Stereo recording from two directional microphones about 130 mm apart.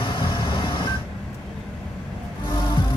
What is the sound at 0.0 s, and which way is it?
Vehicle, 40° left (ahead or behind).